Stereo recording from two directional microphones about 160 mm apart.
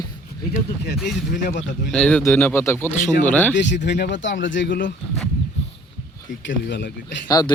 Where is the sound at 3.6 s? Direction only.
90° left.